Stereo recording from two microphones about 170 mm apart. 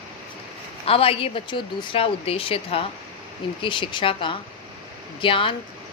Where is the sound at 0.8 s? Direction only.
35° left (ahead or behind).